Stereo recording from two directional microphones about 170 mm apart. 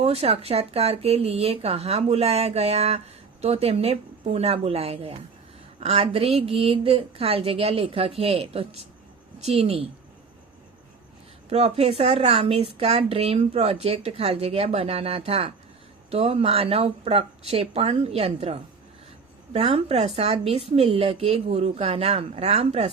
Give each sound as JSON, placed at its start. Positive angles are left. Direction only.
{"t": 0.0, "sound": "speech", "side_deg": -35}
{"t": 11.4, "sound": "speech", "side_deg": -35}